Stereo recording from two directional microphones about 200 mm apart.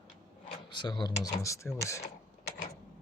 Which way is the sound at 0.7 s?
20° left (ahead or behind).